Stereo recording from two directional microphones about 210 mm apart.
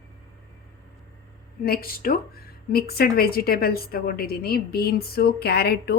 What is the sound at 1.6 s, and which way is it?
A woman's voice, 45° left (ahead or behind).